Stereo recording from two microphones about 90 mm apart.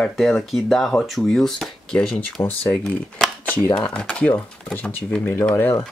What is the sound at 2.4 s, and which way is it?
Speech, 20° left (ahead or behind).